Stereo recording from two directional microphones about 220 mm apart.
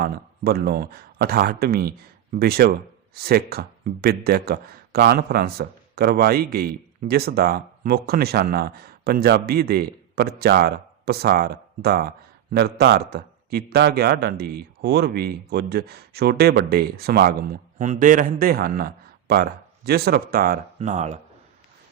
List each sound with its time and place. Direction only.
0.0 s speech: 45° right (ahead or behind)